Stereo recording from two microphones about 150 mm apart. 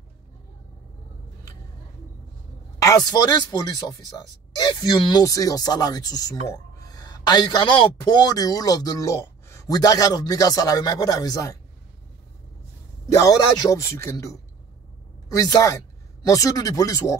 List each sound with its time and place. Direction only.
2.8 s a man's voice: 25° left (ahead or behind)
13.1 s a man's voice: 25° left (ahead or behind)